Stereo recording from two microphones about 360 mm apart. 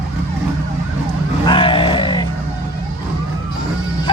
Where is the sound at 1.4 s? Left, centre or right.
Centre.